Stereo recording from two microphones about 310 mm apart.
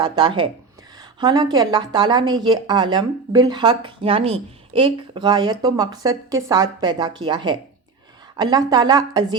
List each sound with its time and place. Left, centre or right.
0.0 s speech: centre